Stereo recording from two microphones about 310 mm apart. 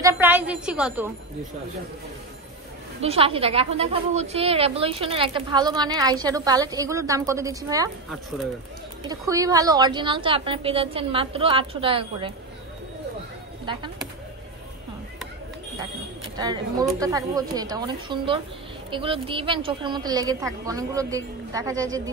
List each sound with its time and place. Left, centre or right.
0.0 s a woman's voice: centre
3.0 s a woman's voice: centre
9.1 s a woman's voice: centre
17.0 s a woman's voice: centre